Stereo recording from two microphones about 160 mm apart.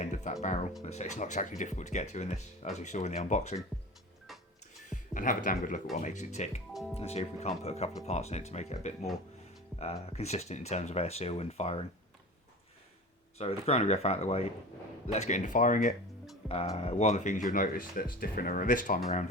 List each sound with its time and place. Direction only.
0.0 s music: 50° left (ahead or behind)
0.9 s speech: 45° left (ahead or behind)
3.7 s music: 5° left (ahead or behind)
4.9 s speech: 55° left (ahead or behind)
13.4 s speech: 40° left (ahead or behind)
16.5 s speech: 40° left (ahead or behind); by 18.9 s 55° left (ahead or behind)